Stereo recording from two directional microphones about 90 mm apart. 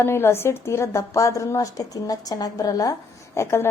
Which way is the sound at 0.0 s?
25° left (ahead or behind).